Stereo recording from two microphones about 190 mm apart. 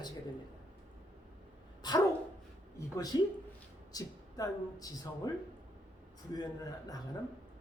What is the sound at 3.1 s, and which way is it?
A man's voice, 20° left (ahead or behind).